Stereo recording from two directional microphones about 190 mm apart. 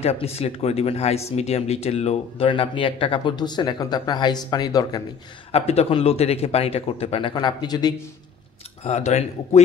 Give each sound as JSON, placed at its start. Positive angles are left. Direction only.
{"t": 0.0, "sound": "speech", "side_deg": 35}
{"t": 5.5, "sound": "speech", "side_deg": 30}
{"t": 8.8, "sound": "speech", "side_deg": 35}